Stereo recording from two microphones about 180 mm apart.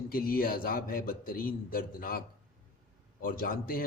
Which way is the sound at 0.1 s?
55° left (ahead or behind).